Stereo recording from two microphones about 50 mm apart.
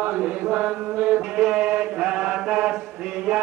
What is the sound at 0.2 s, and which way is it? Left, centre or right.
Mantra, right.